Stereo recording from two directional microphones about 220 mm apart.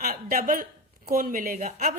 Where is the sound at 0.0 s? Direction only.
40° right (ahead or behind).